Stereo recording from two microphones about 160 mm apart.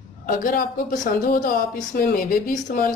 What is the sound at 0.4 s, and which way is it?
Speech, 60° left (ahead or behind).